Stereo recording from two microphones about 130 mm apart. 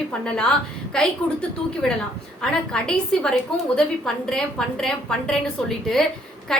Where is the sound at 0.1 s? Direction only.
10° left (ahead or behind).